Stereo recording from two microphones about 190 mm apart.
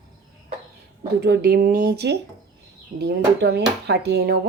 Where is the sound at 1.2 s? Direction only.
60° right (ahead or behind).